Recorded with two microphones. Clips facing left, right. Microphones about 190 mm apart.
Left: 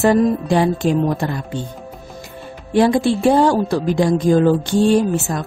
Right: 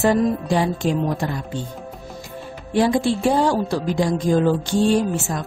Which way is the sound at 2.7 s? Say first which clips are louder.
Left 4 dB; 60° left (ahead or behind).